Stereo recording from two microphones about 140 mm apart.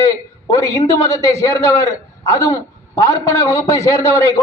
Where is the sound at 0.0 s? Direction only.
25° left (ahead or behind).